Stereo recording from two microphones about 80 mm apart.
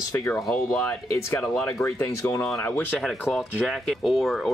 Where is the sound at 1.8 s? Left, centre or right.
Left.